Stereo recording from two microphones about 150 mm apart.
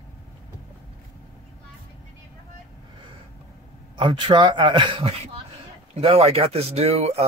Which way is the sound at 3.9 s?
30° right (ahead or behind).